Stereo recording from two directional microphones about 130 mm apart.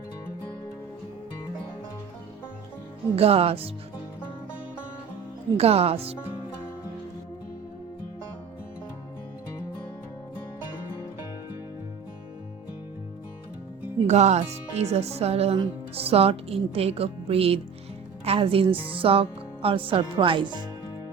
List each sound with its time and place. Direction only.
3.2 s speech: 50° right (ahead or behind)
5.5 s speech: 50° right (ahead or behind)
14.1 s speech: 60° right (ahead or behind); by 20.7 s 35° right (ahead or behind)